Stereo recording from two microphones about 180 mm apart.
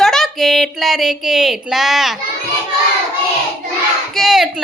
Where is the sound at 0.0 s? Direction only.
Centre (ahead or behind).